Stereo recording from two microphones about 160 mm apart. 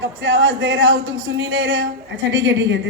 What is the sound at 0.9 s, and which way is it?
Speech, 90° right.